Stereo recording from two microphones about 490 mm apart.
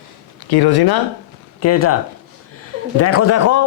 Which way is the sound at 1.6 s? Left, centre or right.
Left.